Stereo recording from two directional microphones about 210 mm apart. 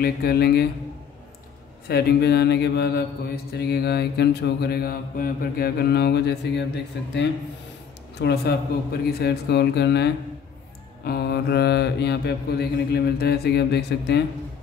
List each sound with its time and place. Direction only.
0.0 s mantra: 45° left (ahead or behind)
1.9 s mantra: 50° left (ahead or behind)
8.2 s mantra: 50° left (ahead or behind)